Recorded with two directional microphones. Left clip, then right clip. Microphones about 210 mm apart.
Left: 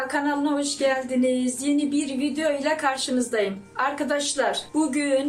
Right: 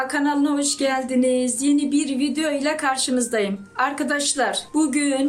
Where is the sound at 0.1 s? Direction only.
50° right (ahead or behind).